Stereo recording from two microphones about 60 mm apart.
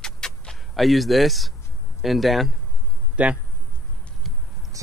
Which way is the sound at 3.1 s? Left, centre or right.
Right.